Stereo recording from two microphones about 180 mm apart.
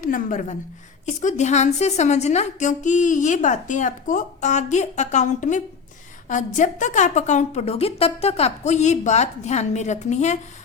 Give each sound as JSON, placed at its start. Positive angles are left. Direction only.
{"t": 0.0, "sound": "a woman's voice", "side_deg": 45}